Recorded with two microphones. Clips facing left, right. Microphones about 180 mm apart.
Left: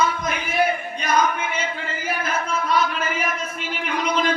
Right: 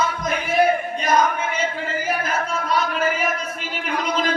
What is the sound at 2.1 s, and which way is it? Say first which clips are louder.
Chant: left 1 dB; 40° right (ahead or behind).